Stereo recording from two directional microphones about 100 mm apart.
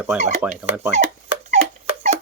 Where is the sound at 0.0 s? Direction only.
10° right (ahead or behind).